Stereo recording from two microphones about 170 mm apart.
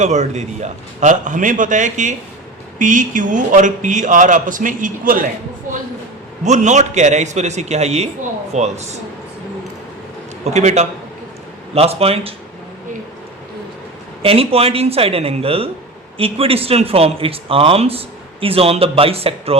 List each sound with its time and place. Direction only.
0.0 s a man's voice: 45° right (ahead or behind)
6.4 s a man's voice: 45° right (ahead or behind)
10.4 s speech: 40° right (ahead or behind)
14.2 s speech: 35° right (ahead or behind)